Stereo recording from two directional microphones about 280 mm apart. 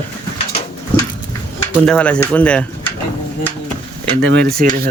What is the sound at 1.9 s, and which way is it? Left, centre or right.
Speech, centre.